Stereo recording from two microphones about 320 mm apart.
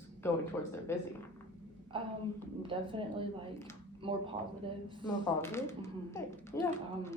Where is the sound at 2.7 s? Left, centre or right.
Centre.